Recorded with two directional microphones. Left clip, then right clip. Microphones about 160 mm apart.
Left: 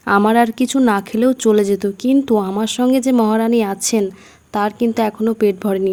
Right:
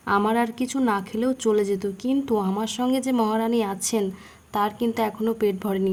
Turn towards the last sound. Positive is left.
turn(degrees=35)  # may be behind; listen again after turning